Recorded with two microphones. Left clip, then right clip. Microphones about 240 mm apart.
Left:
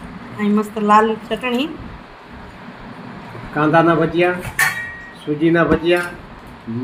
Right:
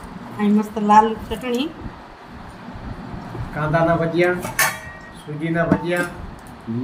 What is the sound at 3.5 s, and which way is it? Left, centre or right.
Speech, left.